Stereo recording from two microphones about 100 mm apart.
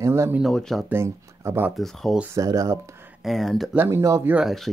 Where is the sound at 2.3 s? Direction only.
35° right (ahead or behind).